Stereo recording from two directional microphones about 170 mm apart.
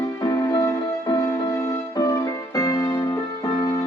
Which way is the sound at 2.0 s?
20° left (ahead or behind).